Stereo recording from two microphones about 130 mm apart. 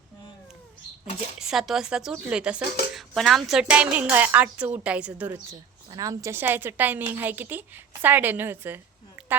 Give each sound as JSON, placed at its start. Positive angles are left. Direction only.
{"t": 1.4, "sound": "a woman's voice", "side_deg": -5}
{"t": 5.5, "sound": "a woman's voice", "side_deg": -25}